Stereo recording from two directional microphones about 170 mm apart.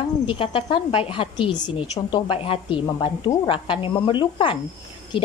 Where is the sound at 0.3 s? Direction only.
30° left (ahead or behind).